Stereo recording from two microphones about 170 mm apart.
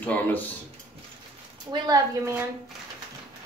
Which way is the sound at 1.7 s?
20° right (ahead or behind).